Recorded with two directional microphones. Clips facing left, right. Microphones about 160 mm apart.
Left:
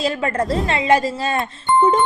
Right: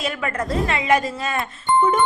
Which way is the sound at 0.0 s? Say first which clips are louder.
Left 5 dB; 30° left (ahead or behind).